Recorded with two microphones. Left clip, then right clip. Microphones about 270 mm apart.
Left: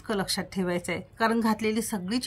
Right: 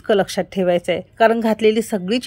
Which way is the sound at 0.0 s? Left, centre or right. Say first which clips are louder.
Right 12 dB; centre.